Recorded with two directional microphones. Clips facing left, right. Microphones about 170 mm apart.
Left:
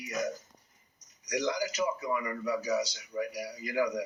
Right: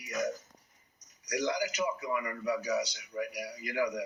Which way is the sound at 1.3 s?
30° left (ahead or behind).